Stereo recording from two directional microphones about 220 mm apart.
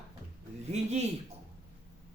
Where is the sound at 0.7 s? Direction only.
30° right (ahead or behind).